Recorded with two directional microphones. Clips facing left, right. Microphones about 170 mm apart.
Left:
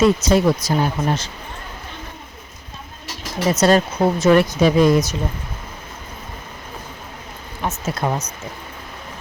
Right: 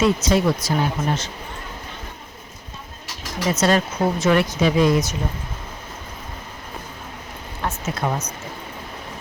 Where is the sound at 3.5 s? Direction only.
40° left (ahead or behind).